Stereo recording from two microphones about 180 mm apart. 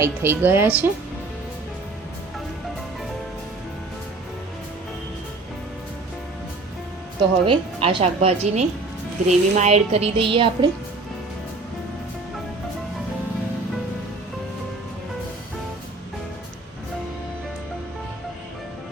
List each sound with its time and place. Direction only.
0.0 s a woman's voice: 15° right (ahead or behind)
7.4 s speech: 30° right (ahead or behind)